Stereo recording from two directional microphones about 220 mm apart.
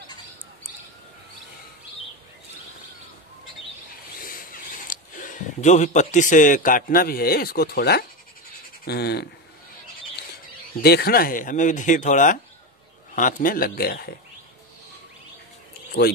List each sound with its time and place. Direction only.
4.2 s speech: 40° left (ahead or behind)
10.8 s speech: 45° left (ahead or behind)